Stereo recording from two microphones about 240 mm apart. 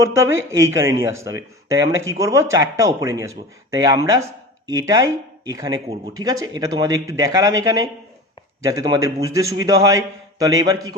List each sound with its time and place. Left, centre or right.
0.5 s speech: centre